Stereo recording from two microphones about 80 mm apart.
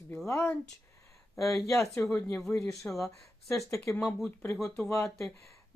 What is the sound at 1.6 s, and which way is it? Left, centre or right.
Speech, left.